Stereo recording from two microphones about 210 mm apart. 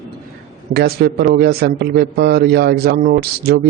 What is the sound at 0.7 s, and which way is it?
A man's voice, 50° right (ahead or behind).